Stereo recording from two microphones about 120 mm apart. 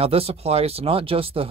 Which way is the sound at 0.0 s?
55° right (ahead or behind).